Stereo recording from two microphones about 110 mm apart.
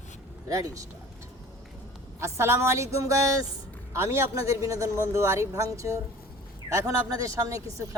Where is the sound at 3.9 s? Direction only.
25° right (ahead or behind).